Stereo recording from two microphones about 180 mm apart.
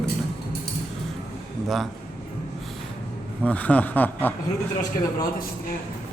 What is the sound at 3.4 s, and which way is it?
Speech, 10° left (ahead or behind).